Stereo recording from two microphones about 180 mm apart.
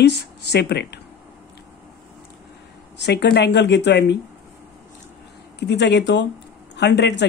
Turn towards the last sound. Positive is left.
turn(degrees=70)  # may be behind; listen again after turning